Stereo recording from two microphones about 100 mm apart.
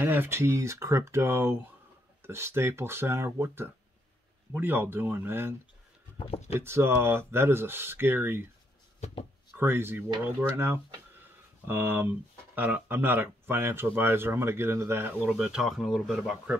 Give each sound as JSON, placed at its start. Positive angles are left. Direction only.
{"t": 0.0, "sound": "speech", "side_deg": -20}
{"t": 6.1, "sound": "speech", "side_deg": 80}
{"t": 6.6, "sound": "speech", "side_deg": -25}
{"t": 9.6, "sound": "speech", "side_deg": -25}
{"t": 11.1, "sound": "a sound", "side_deg": -20}
{"t": 12.5, "sound": "speech", "side_deg": -15}
{"t": 15.1, "sound": "speech", "side_deg": -15}